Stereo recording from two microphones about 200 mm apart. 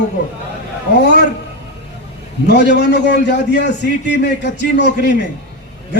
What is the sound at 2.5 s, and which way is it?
A man's voice, 60° left (ahead or behind).